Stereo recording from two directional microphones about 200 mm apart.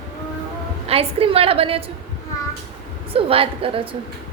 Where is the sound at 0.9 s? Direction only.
30° right (ahead or behind).